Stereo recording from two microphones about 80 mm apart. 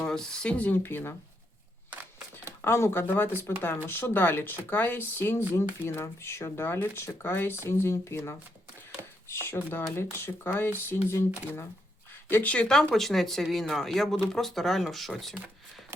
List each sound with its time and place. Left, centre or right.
0.0 s speech: centre; by 1.1 s left
1.9 s single-lens reflex camera: right
2.6 s speech: left
9.0 s a sound: right
9.3 s speech: left
12.3 s speech: centre